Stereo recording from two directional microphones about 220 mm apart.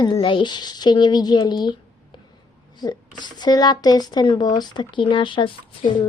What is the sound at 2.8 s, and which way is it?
A woman's voice, 20° left (ahead or behind).